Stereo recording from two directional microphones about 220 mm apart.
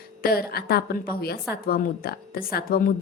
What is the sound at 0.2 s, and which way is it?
A woman's voice, 45° left (ahead or behind).